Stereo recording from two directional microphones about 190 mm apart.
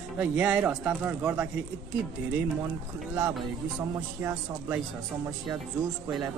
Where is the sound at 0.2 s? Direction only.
10° right (ahead or behind).